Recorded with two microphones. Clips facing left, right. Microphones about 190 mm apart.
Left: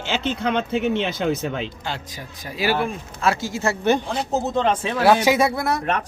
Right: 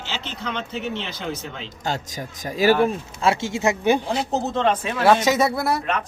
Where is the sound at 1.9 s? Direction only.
45° right (ahead or behind).